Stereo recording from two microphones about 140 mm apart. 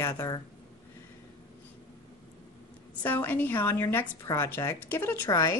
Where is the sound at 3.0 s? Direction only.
15° left (ahead or behind).